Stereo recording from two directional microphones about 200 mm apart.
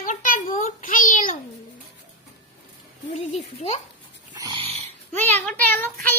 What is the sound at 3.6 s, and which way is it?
Speech, 30° left (ahead or behind).